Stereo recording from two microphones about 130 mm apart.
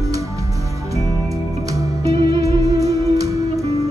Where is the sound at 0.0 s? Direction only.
25° right (ahead or behind).